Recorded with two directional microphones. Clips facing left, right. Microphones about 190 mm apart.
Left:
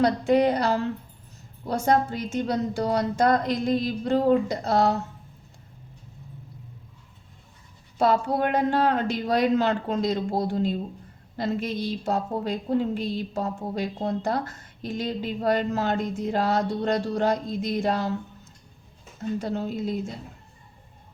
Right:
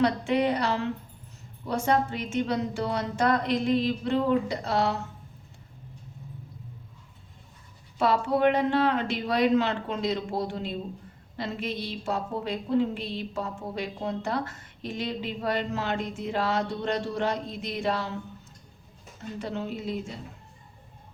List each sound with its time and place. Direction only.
0.0 s a woman's voice: 40° left (ahead or behind)
7.9 s a woman's voice: 40° left (ahead or behind)
19.4 s a woman's voice: 40° left (ahead or behind)